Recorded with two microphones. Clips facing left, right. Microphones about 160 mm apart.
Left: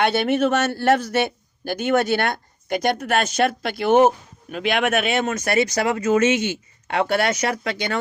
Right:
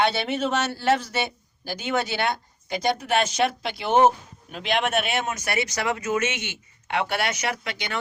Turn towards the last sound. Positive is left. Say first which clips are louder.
# left 6 dB
turn(degrees=40)  # may be behind; listen again after turning